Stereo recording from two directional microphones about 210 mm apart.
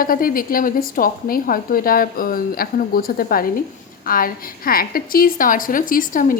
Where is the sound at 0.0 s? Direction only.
40° left (ahead or behind).